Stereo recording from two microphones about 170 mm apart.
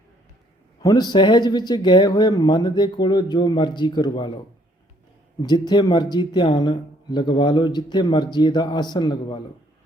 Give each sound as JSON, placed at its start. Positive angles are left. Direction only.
{"t": 0.8, "sound": "speech", "side_deg": 20}
{"t": 5.4, "sound": "speech", "side_deg": 25}